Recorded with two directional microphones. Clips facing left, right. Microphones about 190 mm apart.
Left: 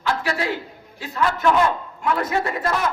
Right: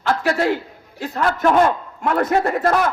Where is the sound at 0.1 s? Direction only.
50° right (ahead or behind).